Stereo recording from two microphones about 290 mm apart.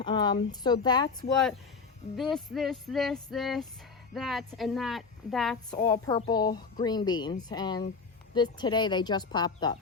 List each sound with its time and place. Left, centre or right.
0.0 s speech: centre
2.1 s a woman's voice: centre
5.7 s speech: centre